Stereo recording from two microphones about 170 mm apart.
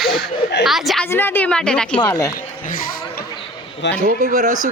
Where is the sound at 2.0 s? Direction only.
20° left (ahead or behind).